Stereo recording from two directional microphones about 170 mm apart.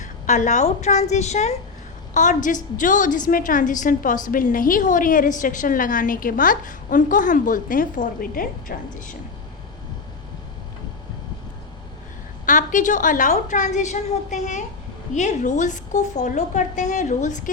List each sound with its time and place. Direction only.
0.0 s a woman's voice: 45° left (ahead or behind)
12.5 s a woman's voice: 50° left (ahead or behind)